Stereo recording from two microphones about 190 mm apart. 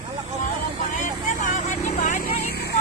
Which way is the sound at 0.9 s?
40° left (ahead or behind).